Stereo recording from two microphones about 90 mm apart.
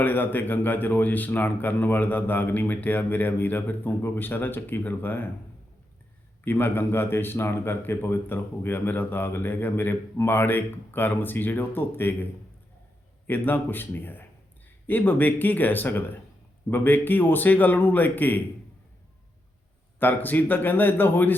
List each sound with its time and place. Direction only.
0.0 s a man's voice: 20° left (ahead or behind)
6.4 s a man's voice: 25° left (ahead or behind)
20.0 s a man's voice: 20° left (ahead or behind)